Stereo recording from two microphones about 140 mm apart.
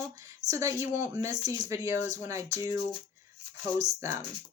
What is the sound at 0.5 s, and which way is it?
Speech, 20° right (ahead or behind).